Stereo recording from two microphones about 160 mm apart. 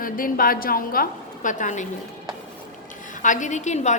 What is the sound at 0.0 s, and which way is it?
A woman's voice, 65° left (ahead or behind).